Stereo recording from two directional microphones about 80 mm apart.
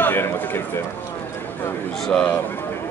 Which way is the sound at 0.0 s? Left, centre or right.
Left.